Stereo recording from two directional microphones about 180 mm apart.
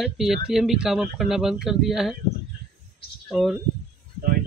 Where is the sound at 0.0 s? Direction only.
Centre (ahead or behind).